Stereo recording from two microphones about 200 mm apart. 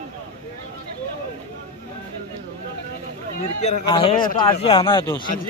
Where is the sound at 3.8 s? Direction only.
25° left (ahead or behind).